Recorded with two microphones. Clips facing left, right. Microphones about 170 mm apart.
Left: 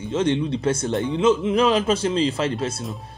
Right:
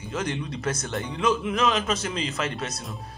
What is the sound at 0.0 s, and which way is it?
Speech, 25° left (ahead or behind).